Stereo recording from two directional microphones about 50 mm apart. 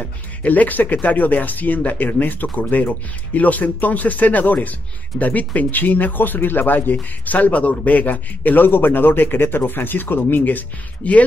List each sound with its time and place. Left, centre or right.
0.4 s speech: left